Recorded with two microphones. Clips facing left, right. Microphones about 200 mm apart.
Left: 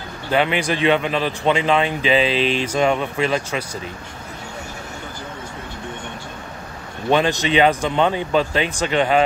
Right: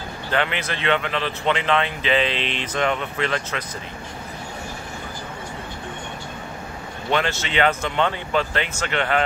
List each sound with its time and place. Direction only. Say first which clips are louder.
0.3 s a man's voice: left 6 dB; 15° left (ahead or behind)
7.1 s a man's voice: left 6 dB; 15° left (ahead or behind)